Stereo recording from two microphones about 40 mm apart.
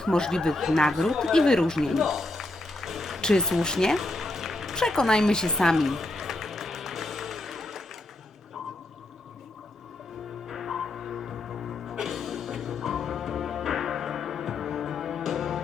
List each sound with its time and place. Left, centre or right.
0.0 s speech: centre
0.5 s speech: centre
1.9 s music: centre
3.2 s speech: centre
3.9 s music: centre
4.9 s speech: centre
5.7 s music: centre
10.5 s music: centre